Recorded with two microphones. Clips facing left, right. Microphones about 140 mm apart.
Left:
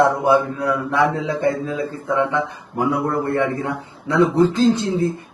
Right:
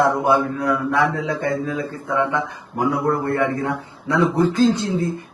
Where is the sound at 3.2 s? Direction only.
20° left (ahead or behind).